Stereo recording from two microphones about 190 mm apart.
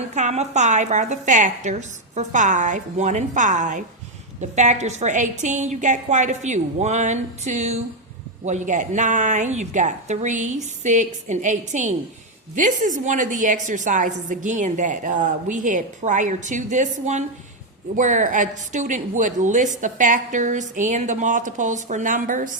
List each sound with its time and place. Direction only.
0.1 s a woman's voice: 40° right (ahead or behind)